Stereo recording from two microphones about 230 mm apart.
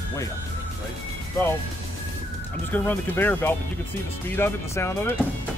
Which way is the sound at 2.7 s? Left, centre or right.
Centre.